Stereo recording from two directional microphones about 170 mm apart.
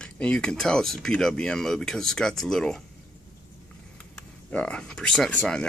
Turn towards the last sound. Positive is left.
turn(degrees=5)  # may be behind; listen again after turning